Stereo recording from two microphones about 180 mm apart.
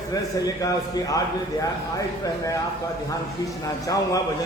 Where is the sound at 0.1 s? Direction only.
20° left (ahead or behind).